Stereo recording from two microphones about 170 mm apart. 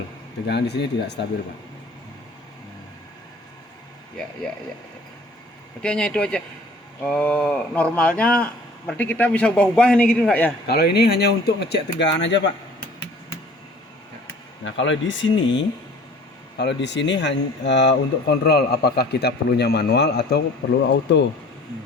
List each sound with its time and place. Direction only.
0.4 s speech: 80° left
5.8 s a man's voice: 5° left (ahead or behind)
10.7 s speech: 70° left (ahead or behind); by 12.5 s 90° left
14.6 s speech: 90° left; by 20.4 s 75° left (ahead or behind)
20.9 s speech: 90° left